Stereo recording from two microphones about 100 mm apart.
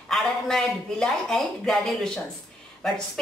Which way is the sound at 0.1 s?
5° left (ahead or behind).